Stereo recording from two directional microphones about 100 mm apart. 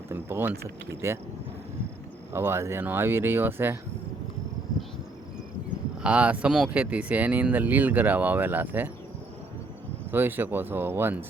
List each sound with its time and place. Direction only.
0.1 s speech: 20° right (ahead or behind)
2.3 s speech: 25° right (ahead or behind)
6.0 s speech: 10° right (ahead or behind)
10.1 s speech: 20° right (ahead or behind)